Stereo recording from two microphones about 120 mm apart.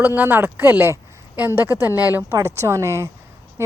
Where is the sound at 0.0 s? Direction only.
15° right (ahead or behind).